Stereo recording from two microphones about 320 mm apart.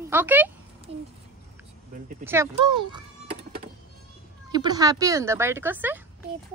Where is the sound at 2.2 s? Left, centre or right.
Centre.